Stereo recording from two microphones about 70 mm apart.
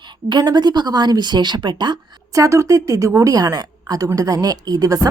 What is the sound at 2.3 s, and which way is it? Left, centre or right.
A woman's voice, right.